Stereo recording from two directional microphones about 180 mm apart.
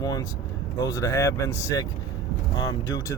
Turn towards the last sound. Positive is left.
turn(degrees=15)  # may be behind; listen again after turning